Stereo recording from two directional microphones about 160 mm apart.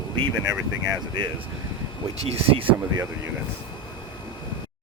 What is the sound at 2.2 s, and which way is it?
Speech, 40° right (ahead or behind).